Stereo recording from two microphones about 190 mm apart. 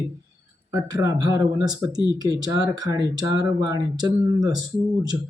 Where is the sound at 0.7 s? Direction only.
15° right (ahead or behind).